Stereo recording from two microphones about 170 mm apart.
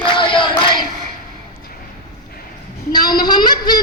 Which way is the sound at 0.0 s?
30° left (ahead or behind).